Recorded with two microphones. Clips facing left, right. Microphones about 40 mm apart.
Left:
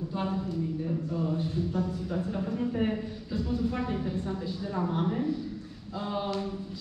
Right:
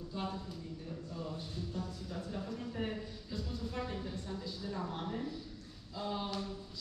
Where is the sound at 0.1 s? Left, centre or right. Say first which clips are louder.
Left 8 dB; left.